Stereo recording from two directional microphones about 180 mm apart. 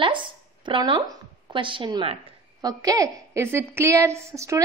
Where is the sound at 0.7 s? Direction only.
25° right (ahead or behind).